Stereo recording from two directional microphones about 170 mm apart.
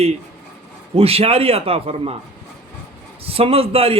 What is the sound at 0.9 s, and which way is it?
A man's voice, 35° right (ahead or behind).